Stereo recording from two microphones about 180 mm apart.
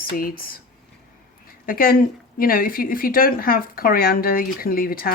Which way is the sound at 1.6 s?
55° left (ahead or behind).